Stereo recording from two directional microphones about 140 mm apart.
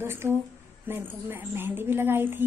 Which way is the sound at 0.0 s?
15° right (ahead or behind).